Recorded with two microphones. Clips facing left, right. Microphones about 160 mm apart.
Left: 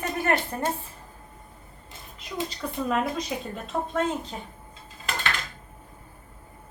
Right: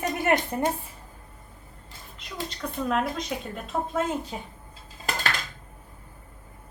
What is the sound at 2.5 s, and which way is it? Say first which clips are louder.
A woman's voice: right 2 dB; centre (ahead or behind).